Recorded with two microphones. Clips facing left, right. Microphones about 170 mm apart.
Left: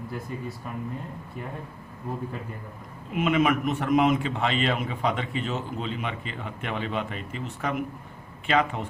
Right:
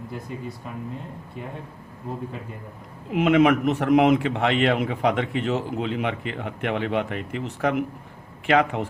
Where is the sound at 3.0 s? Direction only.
75° right (ahead or behind).